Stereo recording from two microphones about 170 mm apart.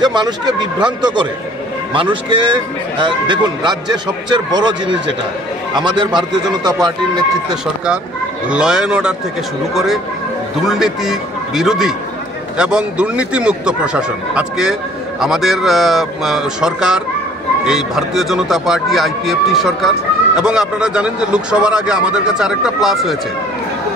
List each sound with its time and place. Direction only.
0.0 s a man's voice: 25° right (ahead or behind)
5.8 s a man's voice: 25° right (ahead or behind)
8.5 s speech: 5° right (ahead or behind)
10.7 s speech: centre (ahead or behind)